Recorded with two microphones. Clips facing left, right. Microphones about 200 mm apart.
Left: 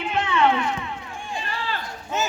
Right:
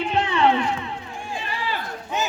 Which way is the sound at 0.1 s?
35° right (ahead or behind).